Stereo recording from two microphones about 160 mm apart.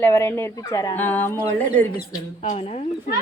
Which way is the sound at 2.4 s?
40° left (ahead or behind).